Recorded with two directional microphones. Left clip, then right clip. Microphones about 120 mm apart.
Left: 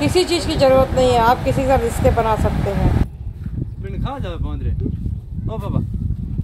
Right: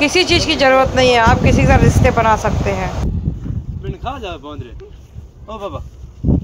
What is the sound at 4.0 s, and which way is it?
Speech, 75° left (ahead or behind).